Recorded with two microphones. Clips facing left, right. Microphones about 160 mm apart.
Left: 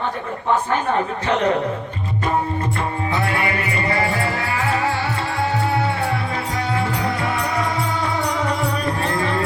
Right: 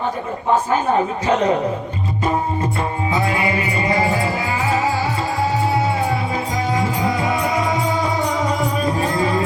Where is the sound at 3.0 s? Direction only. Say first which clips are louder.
Right 3 dB; 15° right (ahead or behind).